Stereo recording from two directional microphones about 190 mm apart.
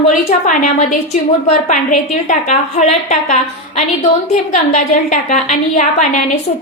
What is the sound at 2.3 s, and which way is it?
A woman's voice, 40° left (ahead or behind).